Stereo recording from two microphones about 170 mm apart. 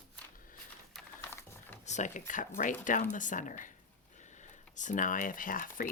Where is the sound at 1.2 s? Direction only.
15° left (ahead or behind).